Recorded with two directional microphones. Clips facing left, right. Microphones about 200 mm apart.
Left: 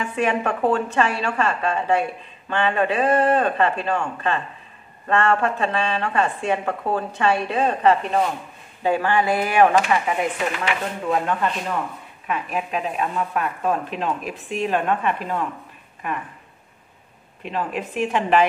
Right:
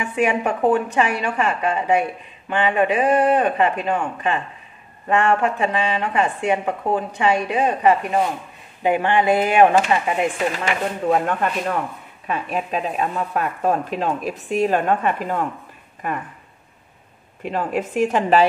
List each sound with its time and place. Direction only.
0.0 s a woman's voice: 10° right (ahead or behind)
10.5 s a woman's voice: 40° right (ahead or behind)
12.3 s speech: 35° right (ahead or behind)
17.5 s a woman's voice: 45° right (ahead or behind)